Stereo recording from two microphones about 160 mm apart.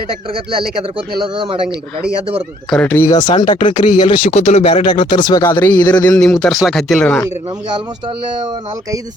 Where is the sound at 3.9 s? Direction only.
50° left (ahead or behind).